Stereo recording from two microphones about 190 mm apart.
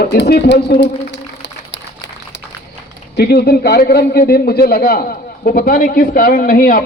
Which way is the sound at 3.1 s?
55° left (ahead or behind).